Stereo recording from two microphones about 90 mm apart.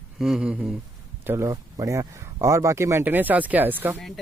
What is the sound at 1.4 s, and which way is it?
Speech, 40° right (ahead or behind).